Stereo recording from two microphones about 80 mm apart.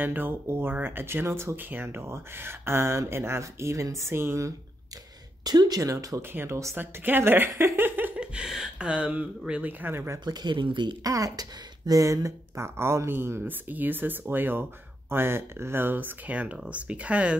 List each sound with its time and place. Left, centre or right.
0.0 s speech: right
5.4 s speech: right
5.8 s speech: right
8.2 s speech: centre; by 10.2 s right
10.2 s speech: right
11.1 s speech: right; by 17.4 s centre